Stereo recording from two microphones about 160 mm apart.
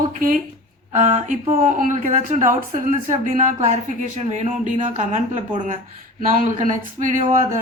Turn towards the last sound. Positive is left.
turn(degrees=-55)  # may be behind; listen again after turning